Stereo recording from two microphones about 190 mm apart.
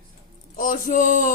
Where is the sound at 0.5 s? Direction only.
45° left (ahead or behind).